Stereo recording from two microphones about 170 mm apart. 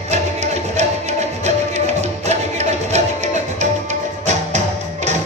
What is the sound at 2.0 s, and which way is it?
Music, 40° right (ahead or behind).